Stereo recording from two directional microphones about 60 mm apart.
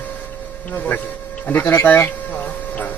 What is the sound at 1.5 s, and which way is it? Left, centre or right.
Speech, left.